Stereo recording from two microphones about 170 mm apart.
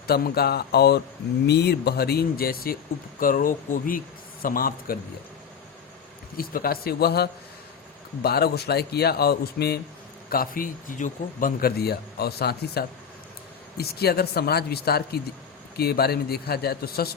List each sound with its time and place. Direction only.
0.1 s a man's voice: 65° left (ahead or behind)
6.3 s a man's voice: 60° left (ahead or behind)
10.2 s a man's voice: 60° left (ahead or behind)